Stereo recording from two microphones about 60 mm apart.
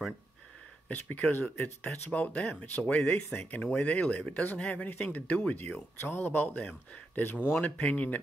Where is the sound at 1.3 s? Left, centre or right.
Left.